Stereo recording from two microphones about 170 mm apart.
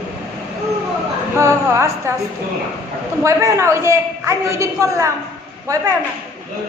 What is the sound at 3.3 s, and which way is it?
A woman's voice, 15° right (ahead or behind).